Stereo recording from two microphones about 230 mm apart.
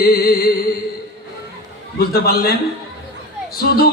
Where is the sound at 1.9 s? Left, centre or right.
Left.